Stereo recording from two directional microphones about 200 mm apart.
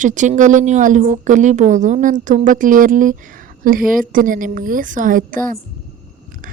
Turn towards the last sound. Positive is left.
turn(degrees=-45)  # may be behind; listen again after turning